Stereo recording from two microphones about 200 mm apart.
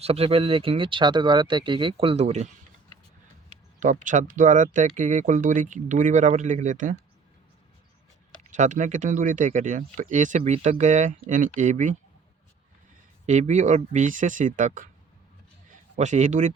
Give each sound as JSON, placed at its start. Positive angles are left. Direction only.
{"t": 0.0, "sound": "speech", "side_deg": -30}
{"t": 3.8, "sound": "speech", "side_deg": -40}
{"t": 8.4, "sound": "speech", "side_deg": -35}
{"t": 13.2, "sound": "speech", "side_deg": -35}
{"t": 16.0, "sound": "speech", "side_deg": -35}